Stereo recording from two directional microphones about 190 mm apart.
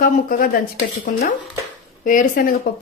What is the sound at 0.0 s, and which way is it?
Speech, 50° left (ahead or behind).